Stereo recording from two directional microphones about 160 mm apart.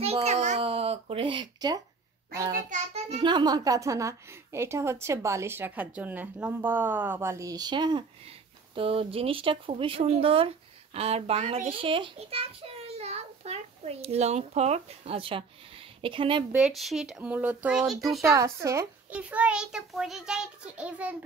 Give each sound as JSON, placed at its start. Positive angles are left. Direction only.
{"t": 0.0, "sound": "a sound", "side_deg": -40}
{"t": 2.9, "sound": "a woman's voice", "side_deg": -35}
{"t": 16.5, "sound": "speech", "side_deg": 0}
{"t": 18.2, "sound": "a woman's voice", "side_deg": -20}